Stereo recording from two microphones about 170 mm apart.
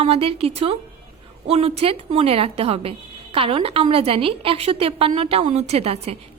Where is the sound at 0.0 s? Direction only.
35° right (ahead or behind).